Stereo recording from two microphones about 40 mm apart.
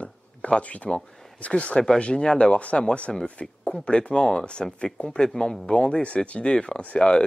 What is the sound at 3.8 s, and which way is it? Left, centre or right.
Speech, left.